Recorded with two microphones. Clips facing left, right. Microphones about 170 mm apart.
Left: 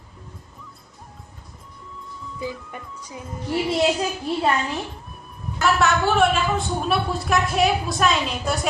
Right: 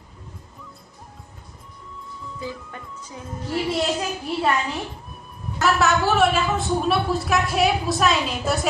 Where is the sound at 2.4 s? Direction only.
10° left (ahead or behind).